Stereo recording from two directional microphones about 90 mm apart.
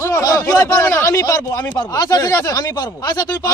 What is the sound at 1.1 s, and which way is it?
A man's voice, 45° left (ahead or behind).